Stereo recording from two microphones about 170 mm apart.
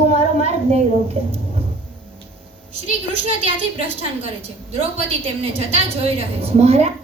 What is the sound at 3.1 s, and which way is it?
A woman's voice, 35° right (ahead or behind).